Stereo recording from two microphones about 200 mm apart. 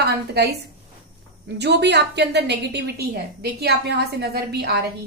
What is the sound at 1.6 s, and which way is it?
A woman's voice, 55° right (ahead or behind).